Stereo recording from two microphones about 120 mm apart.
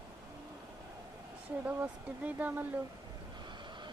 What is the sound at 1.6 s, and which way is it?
Speech, 10° right (ahead or behind).